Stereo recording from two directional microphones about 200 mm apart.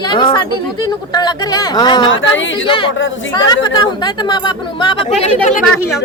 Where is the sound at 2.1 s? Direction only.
70° left (ahead or behind).